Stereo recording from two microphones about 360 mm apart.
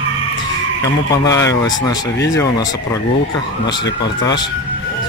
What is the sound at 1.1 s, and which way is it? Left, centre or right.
Speech, centre.